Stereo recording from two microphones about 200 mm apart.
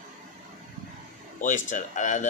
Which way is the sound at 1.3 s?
40° left (ahead or behind).